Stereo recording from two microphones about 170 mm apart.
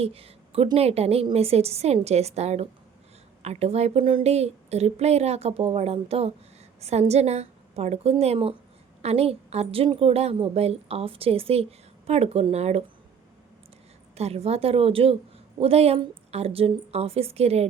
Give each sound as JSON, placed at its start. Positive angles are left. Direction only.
{"t": 0.0, "sound": "a woman's voice", "side_deg": -35}
{"t": 14.2, "sound": "a woman's voice", "side_deg": -35}